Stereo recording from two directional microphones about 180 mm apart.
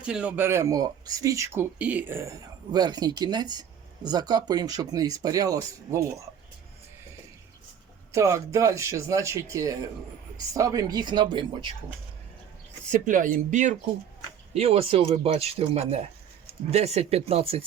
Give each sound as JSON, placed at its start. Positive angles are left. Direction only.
{"t": 0.0, "sound": "speech", "side_deg": -5}
{"t": 8.1, "sound": "speech", "side_deg": -15}
{"t": 12.9, "sound": "speech", "side_deg": -45}